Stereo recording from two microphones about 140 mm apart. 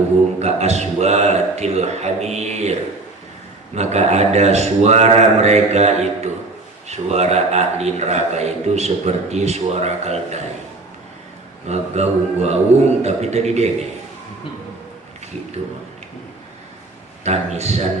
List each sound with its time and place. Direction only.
0.3 s a man's voice: 50° right (ahead or behind)
3.8 s a man's voice: 50° right (ahead or behind)
11.7 s a man's voice: 50° right (ahead or behind)
17.2 s a man's voice: 50° right (ahead or behind)